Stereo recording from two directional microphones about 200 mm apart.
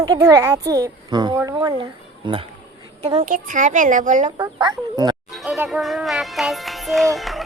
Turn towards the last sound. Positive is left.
turn(degrees=0)  # may be behind; listen again after turning